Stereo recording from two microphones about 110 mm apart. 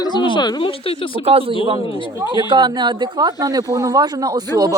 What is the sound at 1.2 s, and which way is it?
Speech, 60° right (ahead or behind).